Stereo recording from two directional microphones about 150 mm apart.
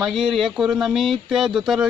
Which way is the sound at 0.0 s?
5° right (ahead or behind).